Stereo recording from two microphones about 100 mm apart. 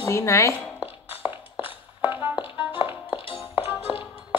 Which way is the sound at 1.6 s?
55° left (ahead or behind).